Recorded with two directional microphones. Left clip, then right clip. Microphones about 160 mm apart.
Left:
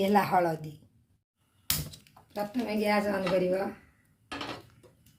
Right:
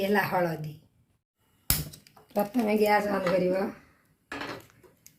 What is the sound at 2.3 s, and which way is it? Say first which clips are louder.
Speech: right 6 dB; 90° right.